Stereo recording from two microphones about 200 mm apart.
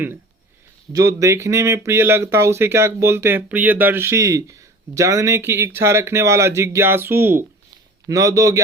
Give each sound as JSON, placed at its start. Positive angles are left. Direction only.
{"t": 0.9, "sound": "speech", "side_deg": -15}